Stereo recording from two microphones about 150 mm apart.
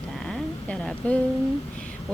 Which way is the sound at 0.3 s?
5° left (ahead or behind).